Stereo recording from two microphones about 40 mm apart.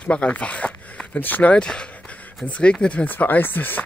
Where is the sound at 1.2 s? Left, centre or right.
Left.